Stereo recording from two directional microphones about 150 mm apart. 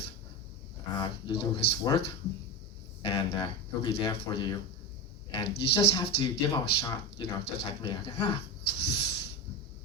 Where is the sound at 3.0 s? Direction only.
35° left (ahead or behind).